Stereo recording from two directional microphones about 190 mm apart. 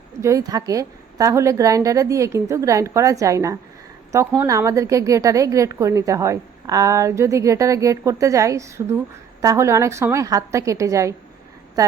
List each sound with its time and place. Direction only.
0.2 s a woman's voice: 15° right (ahead or behind)